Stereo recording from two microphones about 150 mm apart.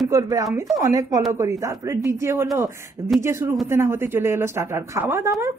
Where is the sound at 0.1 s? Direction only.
20° right (ahead or behind).